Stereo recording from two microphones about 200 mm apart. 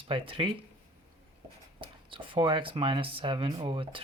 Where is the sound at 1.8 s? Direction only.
25° right (ahead or behind).